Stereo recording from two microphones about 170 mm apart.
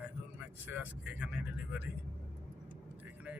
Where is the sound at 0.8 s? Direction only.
5° right (ahead or behind).